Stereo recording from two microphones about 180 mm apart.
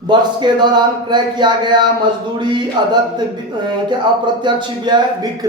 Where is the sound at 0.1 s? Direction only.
25° right (ahead or behind).